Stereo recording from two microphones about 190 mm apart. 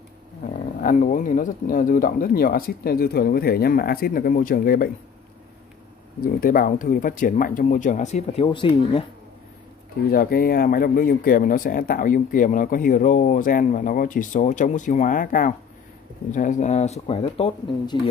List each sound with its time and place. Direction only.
0.7 s speech: 40° left (ahead or behind)
6.2 s speech: 50° left (ahead or behind); by 9.0 s 30° left (ahead or behind)
10.1 s speech: 50° left (ahead or behind); by 17.9 s 30° left (ahead or behind)